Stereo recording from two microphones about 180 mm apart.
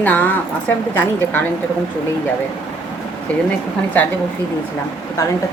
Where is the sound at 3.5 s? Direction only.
10° left (ahead or behind).